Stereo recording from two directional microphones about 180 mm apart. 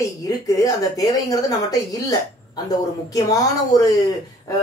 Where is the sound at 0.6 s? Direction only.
20° left (ahead or behind).